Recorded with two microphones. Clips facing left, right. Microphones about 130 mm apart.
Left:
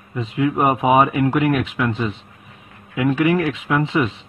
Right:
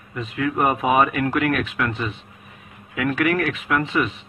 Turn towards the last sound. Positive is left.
turn(degrees=20)  # may be behind; listen again after turning